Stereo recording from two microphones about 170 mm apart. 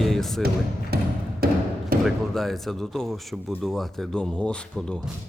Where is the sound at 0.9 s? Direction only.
65° right (ahead or behind).